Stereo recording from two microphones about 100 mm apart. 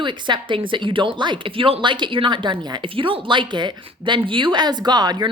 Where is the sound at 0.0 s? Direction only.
50° right (ahead or behind).